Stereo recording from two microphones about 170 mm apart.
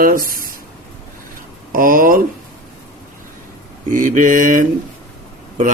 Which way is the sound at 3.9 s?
50° right (ahead or behind).